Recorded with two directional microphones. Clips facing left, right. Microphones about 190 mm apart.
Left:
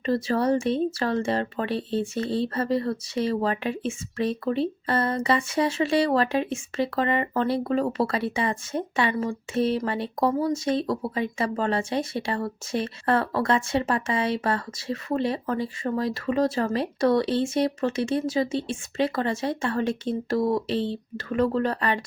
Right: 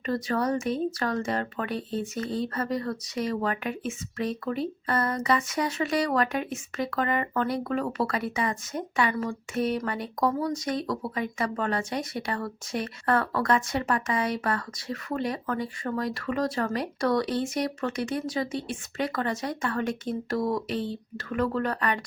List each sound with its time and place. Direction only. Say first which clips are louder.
0.0 s speech: left 4 dB; 25° left (ahead or behind)